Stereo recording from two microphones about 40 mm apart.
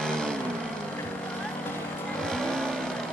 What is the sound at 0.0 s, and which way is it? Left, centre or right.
Vehicle, centre.